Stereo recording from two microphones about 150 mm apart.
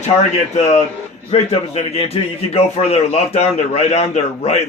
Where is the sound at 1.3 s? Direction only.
45° left (ahead or behind).